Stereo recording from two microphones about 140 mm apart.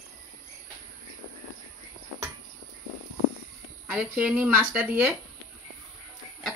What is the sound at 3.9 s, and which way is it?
A woman's voice, 10° right (ahead or behind).